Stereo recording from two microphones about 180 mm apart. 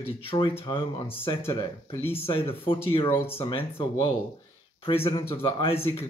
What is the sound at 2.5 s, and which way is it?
Speech, 30° left (ahead or behind).